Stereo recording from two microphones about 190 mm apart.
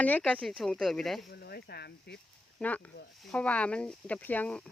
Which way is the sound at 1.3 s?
55° left (ahead or behind).